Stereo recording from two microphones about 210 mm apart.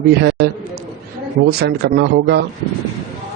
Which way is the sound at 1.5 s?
50° right (ahead or behind).